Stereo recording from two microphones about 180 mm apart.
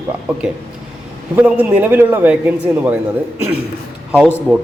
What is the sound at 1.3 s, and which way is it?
A man's voice, 10° right (ahead or behind).